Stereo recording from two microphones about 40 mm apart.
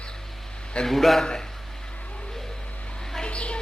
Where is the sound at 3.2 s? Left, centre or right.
Left.